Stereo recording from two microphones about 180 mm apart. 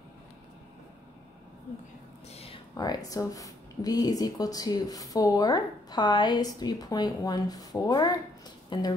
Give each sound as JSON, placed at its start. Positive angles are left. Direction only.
{"t": 2.8, "sound": "speech", "side_deg": 20}